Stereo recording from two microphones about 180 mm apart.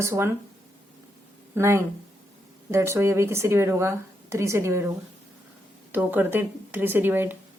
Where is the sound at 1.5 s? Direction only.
15° right (ahead or behind).